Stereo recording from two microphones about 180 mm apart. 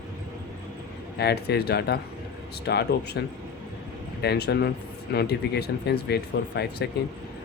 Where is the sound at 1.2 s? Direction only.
65° left (ahead or behind).